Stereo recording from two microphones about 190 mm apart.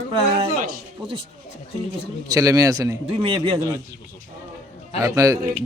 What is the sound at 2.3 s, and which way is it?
A man's voice, 15° right (ahead or behind).